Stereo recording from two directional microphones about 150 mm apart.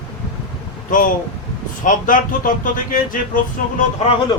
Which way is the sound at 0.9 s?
65° left (ahead or behind).